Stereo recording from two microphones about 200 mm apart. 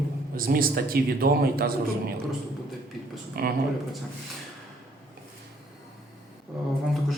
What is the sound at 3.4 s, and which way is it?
Speech, 50° right (ahead or behind).